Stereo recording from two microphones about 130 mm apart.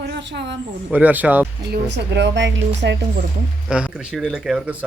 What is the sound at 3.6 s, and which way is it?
Speech, 5° right (ahead or behind).